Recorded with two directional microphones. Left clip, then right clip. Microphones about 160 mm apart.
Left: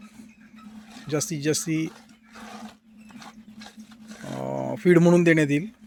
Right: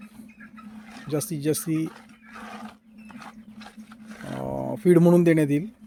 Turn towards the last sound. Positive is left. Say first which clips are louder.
# left 1 dB
turn(degrees=-5)  # may be behind; listen again after turning